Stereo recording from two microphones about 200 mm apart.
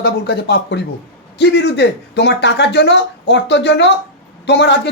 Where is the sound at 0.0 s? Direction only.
55° left (ahead or behind).